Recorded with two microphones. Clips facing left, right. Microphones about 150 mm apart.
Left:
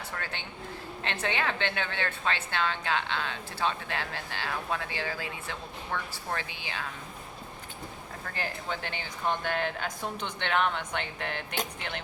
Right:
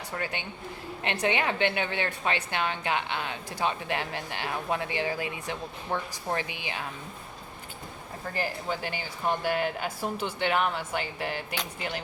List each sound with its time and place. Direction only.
0.1 s a woman's voice: 15° right (ahead or behind)
8.4 s a woman's voice: 5° right (ahead or behind)